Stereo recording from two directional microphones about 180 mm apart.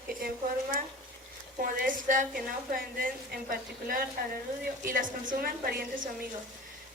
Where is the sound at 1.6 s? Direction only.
50° right (ahead or behind).